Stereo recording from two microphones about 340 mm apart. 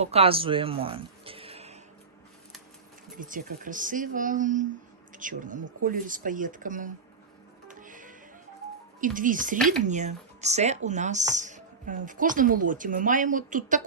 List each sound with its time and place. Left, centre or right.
0.0 s speech: centre
3.2 s speech: right
7.7 s music: right
9.0 s speech: right